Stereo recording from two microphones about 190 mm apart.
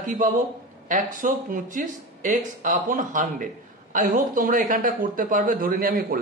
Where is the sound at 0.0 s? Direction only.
45° right (ahead or behind).